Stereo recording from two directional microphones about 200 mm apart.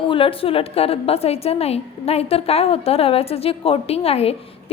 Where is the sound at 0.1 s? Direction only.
25° left (ahead or behind).